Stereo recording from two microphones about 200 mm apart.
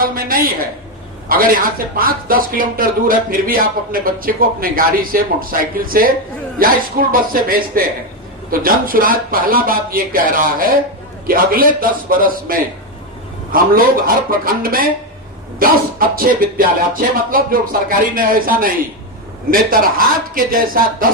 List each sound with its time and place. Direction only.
0.0 s speech: 45° right (ahead or behind)